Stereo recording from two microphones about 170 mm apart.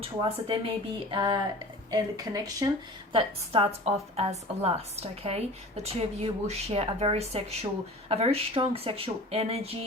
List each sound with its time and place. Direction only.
0.0 s speech: 30° right (ahead or behind)